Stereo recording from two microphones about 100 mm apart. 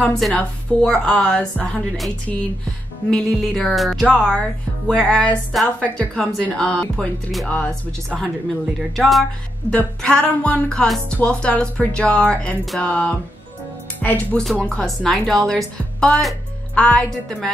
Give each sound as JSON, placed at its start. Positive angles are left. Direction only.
{"t": 0.3, "sound": "speech", "side_deg": 10}
{"t": 3.1, "sound": "music", "side_deg": 5}
{"t": 4.3, "sound": "speech", "side_deg": 10}
{"t": 8.9, "sound": "music", "side_deg": 0}
{"t": 9.7, "sound": "speech", "side_deg": 10}
{"t": 14.4, "sound": "music", "side_deg": 0}
{"t": 14.7, "sound": "speech", "side_deg": 10}